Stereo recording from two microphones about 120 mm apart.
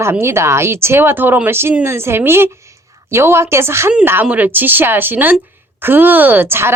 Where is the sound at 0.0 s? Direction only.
20° right (ahead or behind).